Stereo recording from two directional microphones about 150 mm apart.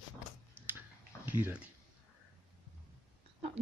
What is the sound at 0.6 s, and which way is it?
Finger snapping, 15° right (ahead or behind).